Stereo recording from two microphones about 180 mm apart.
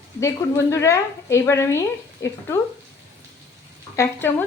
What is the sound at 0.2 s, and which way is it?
A woman's voice, 15° left (ahead or behind).